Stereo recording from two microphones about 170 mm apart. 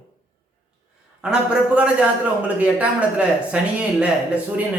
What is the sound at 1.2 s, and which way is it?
A man's voice, 5° right (ahead or behind).